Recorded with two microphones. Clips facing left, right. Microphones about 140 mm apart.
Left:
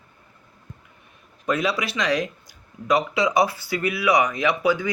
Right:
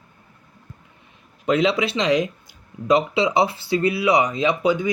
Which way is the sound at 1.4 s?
25° right (ahead or behind).